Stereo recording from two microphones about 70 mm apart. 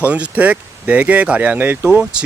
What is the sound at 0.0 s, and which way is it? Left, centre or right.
Speech, right.